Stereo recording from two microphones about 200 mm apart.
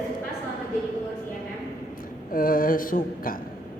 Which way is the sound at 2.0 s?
45° left (ahead or behind).